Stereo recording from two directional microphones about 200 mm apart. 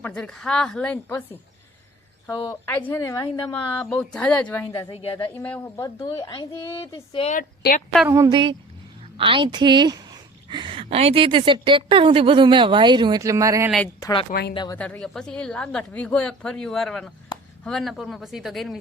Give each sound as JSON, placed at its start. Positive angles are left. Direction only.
{"t": 0.0, "sound": "a woman's voice", "side_deg": 5}
{"t": 4.9, "sound": "a woman's voice", "side_deg": 25}
{"t": 5.4, "sound": "a woman's voice", "side_deg": 10}
{"t": 7.3, "sound": "a woman's voice", "side_deg": 45}
{"t": 8.0, "sound": "speech", "side_deg": -15}
{"t": 13.8, "sound": "a woman's voice", "side_deg": 20}
{"t": 14.8, "sound": "speech", "side_deg": 5}